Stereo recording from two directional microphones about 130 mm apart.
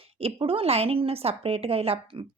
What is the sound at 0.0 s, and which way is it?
A woman's voice, 50° right (ahead or behind).